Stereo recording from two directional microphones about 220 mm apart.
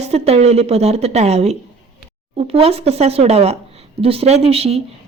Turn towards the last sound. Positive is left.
turn(degrees=-25)  # may be behind; listen again after turning